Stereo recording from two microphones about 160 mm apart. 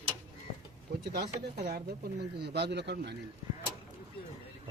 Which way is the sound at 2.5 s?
90° right.